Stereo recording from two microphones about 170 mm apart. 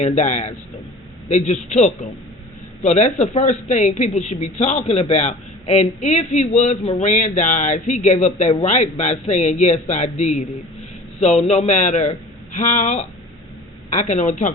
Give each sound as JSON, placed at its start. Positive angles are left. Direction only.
{"t": 0.0, "sound": "a woman's voice", "side_deg": 40}